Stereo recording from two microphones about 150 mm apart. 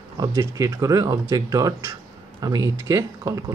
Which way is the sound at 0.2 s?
25° right (ahead or behind).